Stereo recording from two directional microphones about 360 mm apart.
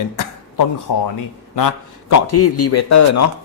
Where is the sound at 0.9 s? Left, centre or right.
Left.